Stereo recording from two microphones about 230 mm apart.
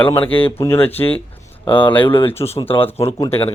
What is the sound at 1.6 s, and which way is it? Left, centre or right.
Speech, left.